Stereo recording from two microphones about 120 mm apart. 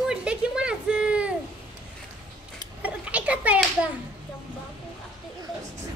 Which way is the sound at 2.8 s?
10° right (ahead or behind).